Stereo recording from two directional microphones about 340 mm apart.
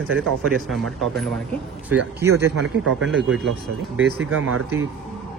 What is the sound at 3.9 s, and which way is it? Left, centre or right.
Speech, right.